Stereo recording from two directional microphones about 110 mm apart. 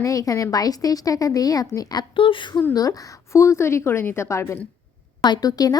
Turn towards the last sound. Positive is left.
turn(degrees=35)  # may be behind; listen again after turning